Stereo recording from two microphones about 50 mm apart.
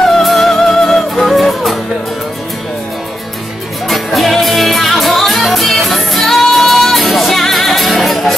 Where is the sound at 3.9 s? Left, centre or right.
Centre.